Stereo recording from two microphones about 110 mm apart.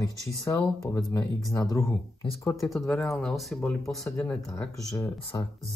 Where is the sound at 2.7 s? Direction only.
Centre (ahead or behind).